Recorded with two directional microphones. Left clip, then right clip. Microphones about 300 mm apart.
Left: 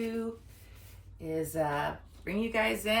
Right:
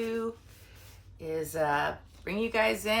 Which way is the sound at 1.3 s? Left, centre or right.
Centre.